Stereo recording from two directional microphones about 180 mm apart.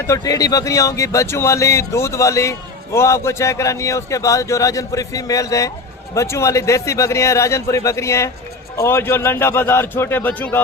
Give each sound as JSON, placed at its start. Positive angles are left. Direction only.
{"t": 0.1, "sound": "speech", "side_deg": 20}